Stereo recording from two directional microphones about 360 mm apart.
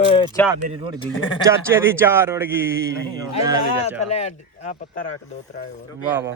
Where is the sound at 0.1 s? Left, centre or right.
Centre.